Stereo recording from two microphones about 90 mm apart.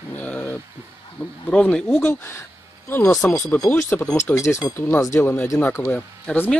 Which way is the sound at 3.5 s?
10° left (ahead or behind).